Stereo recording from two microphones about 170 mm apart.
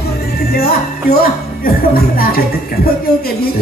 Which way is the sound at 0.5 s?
65° left (ahead or behind).